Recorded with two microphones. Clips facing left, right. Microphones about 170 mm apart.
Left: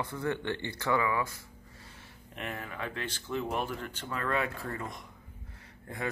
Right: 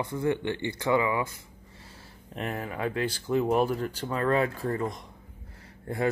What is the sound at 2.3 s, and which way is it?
Speech, 40° right (ahead or behind).